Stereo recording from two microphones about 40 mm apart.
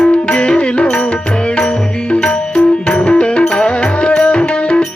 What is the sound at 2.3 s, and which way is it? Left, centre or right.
Music, left.